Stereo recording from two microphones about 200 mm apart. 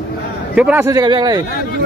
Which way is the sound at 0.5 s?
5° right (ahead or behind).